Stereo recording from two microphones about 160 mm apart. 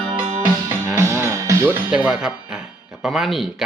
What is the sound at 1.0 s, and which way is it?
Music, 15° right (ahead or behind).